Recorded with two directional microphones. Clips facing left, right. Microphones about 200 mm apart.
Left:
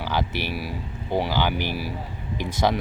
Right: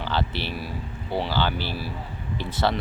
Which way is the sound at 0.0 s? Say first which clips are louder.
Left 1 dB; 10° left (ahead or behind).